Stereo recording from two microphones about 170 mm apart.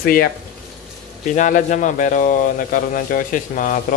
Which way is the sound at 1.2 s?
50° left (ahead or behind).